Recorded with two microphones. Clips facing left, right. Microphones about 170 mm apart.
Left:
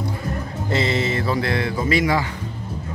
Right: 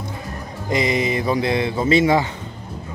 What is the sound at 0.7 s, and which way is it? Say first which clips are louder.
Speech: right 2 dB; 15° right (ahead or behind).